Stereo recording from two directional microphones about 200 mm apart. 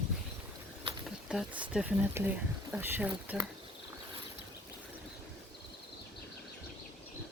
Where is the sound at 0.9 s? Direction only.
25° right (ahead or behind).